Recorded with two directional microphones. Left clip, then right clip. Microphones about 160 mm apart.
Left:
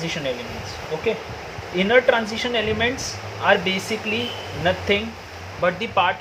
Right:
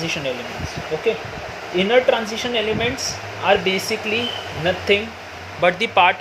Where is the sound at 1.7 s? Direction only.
20° right (ahead or behind).